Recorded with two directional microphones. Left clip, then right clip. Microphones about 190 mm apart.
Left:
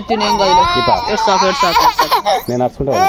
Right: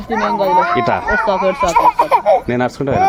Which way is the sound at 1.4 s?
15° left (ahead or behind).